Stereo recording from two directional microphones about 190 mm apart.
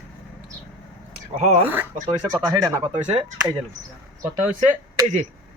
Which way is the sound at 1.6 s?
10° right (ahead or behind).